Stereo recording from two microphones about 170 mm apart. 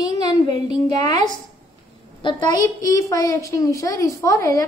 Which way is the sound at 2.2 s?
20° left (ahead or behind).